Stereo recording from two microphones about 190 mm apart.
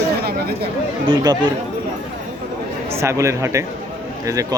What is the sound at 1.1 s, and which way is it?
Speech, 25° right (ahead or behind).